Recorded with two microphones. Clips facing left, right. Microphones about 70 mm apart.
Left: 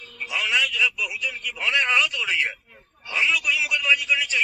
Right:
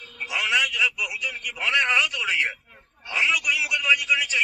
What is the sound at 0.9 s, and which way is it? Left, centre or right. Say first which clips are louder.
A man's voice: left 1 dB; centre.